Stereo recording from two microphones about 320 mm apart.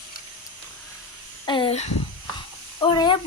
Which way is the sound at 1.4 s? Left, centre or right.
Centre.